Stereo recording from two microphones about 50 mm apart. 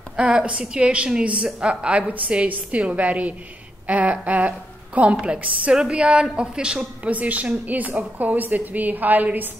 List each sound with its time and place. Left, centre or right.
0.1 s a woman's voice: centre
7.1 s a woman's voice: right